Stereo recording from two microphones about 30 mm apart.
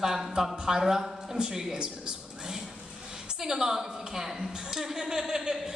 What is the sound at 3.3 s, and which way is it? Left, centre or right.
A woman's voice, centre.